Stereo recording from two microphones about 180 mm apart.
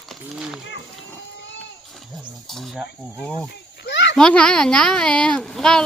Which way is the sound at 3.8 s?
70° left (ahead or behind).